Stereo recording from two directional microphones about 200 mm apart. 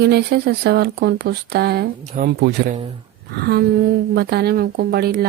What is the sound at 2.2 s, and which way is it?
Speech, 40° right (ahead or behind).